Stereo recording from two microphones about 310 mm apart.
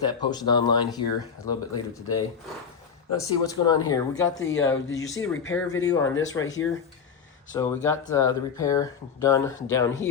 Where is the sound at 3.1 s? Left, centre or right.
Centre.